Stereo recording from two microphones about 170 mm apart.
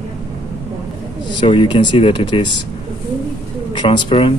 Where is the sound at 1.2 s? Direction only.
30° left (ahead or behind).